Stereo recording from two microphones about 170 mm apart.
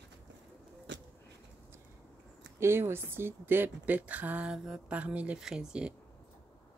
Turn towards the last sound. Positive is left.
turn(degrees=-5)  # may be behind; listen again after turning